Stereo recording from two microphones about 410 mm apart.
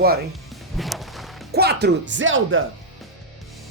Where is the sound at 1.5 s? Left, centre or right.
Right.